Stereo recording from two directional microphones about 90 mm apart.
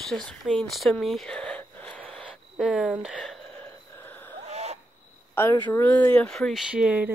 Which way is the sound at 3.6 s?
20° left (ahead or behind).